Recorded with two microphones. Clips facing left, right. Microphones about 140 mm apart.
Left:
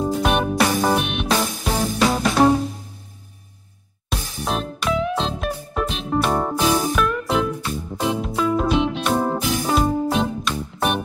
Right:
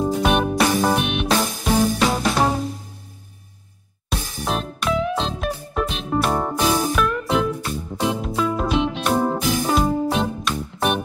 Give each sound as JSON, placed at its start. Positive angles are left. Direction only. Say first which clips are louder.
{"t": 0.0, "sound": "music", "louder": "right 1 dB", "side_deg": 0}
{"t": 4.1, "sound": "music", "louder": "even", "side_deg": 0}